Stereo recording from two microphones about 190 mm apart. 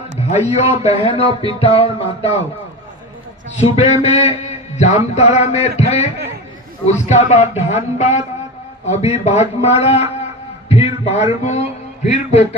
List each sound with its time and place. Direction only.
0.2 s a man's voice: 35° left (ahead or behind)
1.4 s music: 30° left (ahead or behind)
3.6 s a man's voice: 35° left (ahead or behind)
10.7 s a sound: 30° left (ahead or behind)